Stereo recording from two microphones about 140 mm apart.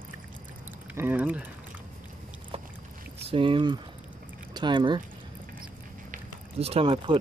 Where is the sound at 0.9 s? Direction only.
10° right (ahead or behind).